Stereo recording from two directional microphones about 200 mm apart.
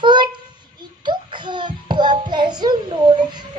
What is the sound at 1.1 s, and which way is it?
A child's voice, 20° right (ahead or behind).